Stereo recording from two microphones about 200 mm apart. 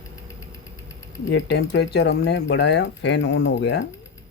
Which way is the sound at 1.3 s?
60° left (ahead or behind).